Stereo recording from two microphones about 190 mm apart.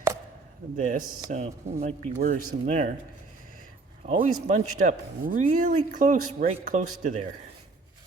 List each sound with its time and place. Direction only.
0.8 s speech: 45° right (ahead or behind)
4.0 s speech: 35° right (ahead or behind)